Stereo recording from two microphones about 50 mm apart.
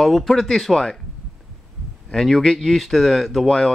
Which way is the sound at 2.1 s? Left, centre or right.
Centre.